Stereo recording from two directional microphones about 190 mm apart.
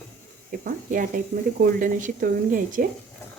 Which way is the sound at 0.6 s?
45° right (ahead or behind).